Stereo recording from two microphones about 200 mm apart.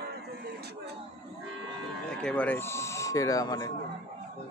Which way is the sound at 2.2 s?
5° left (ahead or behind).